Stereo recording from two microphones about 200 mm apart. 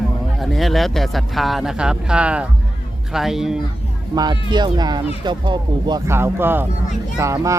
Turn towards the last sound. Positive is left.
turn(degrees=-15)  # may be behind; listen again after turning